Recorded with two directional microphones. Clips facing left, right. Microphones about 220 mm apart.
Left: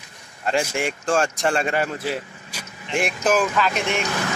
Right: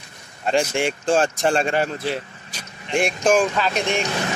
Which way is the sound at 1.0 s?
30° right (ahead or behind).